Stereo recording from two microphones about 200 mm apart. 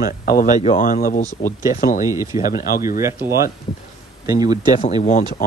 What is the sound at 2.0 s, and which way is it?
Speech, 15° right (ahead or behind).